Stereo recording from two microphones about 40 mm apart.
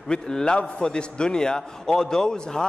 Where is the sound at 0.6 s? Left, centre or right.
Left.